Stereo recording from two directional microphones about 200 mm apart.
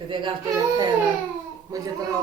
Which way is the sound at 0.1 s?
25° right (ahead or behind).